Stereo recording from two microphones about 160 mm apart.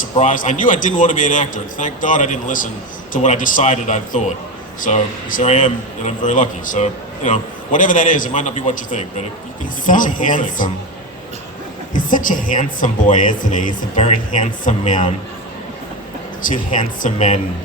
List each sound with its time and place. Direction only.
0.0 s a man's voice: 55° left (ahead or behind)
11.9 s speech: 55° left (ahead or behind)
16.4 s speech: 55° left (ahead or behind)